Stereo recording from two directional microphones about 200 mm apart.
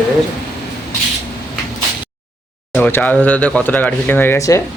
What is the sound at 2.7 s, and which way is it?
Speech, 5° left (ahead or behind).